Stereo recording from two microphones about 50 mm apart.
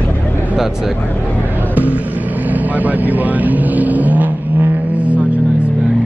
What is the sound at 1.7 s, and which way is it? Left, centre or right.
Vehicle, right.